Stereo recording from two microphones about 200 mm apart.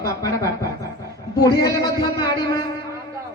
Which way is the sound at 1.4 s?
15° left (ahead or behind).